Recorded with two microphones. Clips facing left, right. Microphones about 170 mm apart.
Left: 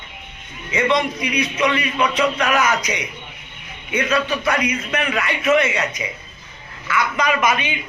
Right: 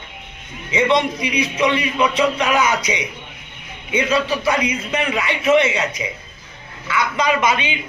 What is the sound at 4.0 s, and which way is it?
A man's voice, 30° right (ahead or behind).